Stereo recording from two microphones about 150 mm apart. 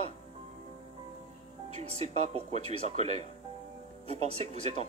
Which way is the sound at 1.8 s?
45° right (ahead or behind).